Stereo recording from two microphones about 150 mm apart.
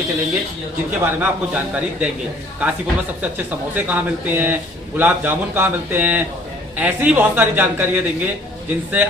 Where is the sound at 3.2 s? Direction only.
10° right (ahead or behind).